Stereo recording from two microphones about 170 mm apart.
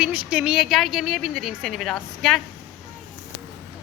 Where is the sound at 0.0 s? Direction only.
5° right (ahead or behind).